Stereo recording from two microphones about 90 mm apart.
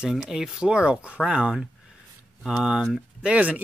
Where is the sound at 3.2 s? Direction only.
15° right (ahead or behind).